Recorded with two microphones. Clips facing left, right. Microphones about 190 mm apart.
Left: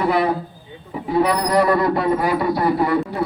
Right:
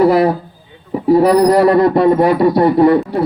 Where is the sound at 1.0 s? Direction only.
40° right (ahead or behind).